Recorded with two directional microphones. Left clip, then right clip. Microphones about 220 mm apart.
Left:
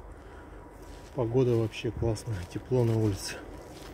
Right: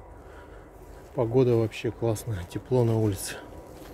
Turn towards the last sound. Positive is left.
turn(degrees=-10)  # may be behind; listen again after turning